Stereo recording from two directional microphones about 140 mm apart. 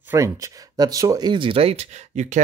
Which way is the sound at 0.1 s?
20° right (ahead or behind).